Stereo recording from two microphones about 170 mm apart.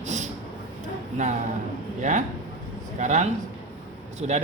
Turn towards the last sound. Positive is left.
turn(degrees=-40)  # may be behind; listen again after turning